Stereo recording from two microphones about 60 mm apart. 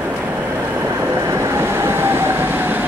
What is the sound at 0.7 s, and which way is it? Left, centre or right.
Train, right.